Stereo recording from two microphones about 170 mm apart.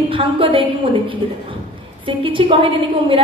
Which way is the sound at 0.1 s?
30° right (ahead or behind).